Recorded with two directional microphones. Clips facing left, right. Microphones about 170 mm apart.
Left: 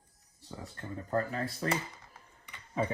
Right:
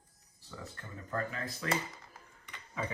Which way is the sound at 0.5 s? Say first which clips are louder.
Left 5 dB; 35° left (ahead or behind).